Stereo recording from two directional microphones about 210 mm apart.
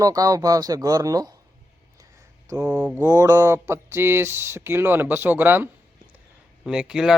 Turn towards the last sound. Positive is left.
turn(degrees=-5)  # may be behind; listen again after turning